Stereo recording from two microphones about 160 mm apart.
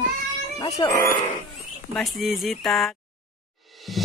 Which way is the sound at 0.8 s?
20° left (ahead or behind).